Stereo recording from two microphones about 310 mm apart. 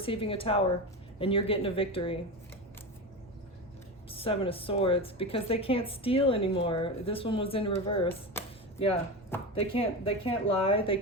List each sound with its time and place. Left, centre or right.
0.0 s a woman's voice: centre
4.1 s a woman's voice: centre
8.3 s a sound: centre
9.6 s a woman's voice: centre